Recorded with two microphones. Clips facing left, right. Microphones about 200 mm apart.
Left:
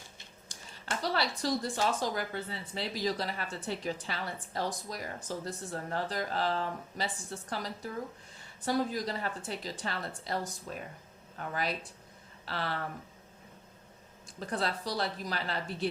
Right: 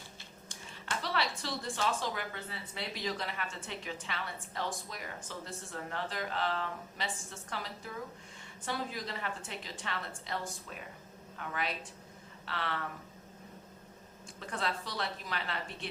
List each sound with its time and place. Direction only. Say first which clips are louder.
0.4 s speech: left 2 dB; 40° left (ahead or behind)
14.3 s speech: left 3 dB; 35° left (ahead or behind)